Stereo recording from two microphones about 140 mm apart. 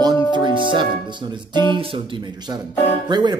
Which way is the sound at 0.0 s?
35° right (ahead or behind).